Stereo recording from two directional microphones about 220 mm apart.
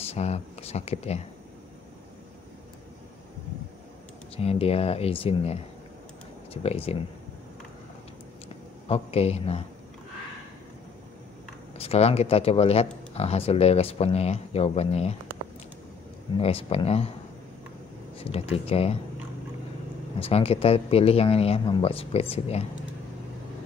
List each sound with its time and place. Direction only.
0.0 s speech: 30° left (ahead or behind)
4.4 s speech: 25° left (ahead or behind)
8.8 s speech: 30° left (ahead or behind)
11.8 s speech: 25° left (ahead or behind)
16.3 s speech: 25° left (ahead or behind)
18.1 s speech: 25° left (ahead or behind)
20.2 s speech: 25° left (ahead or behind)